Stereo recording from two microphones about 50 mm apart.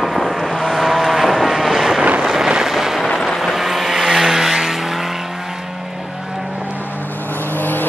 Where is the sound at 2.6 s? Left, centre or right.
Centre.